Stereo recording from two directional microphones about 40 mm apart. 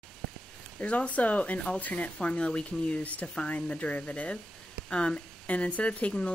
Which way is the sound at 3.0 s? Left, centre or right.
Left.